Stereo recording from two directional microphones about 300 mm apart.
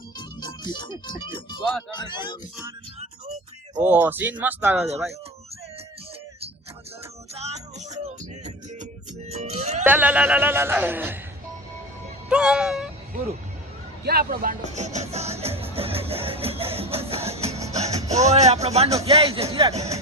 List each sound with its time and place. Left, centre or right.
0.2 s speech: centre
3.0 s a sound: right
3.8 s speech: centre
7.3 s music: right
9.8 s speech: centre
12.3 s speech: centre
14.0 s music: right
18.2 s speech: right